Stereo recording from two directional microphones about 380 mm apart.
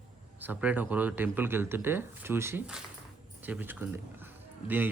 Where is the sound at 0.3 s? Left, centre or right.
Centre.